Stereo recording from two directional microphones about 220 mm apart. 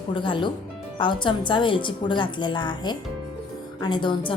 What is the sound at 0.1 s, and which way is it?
A woman's voice, 20° left (ahead or behind).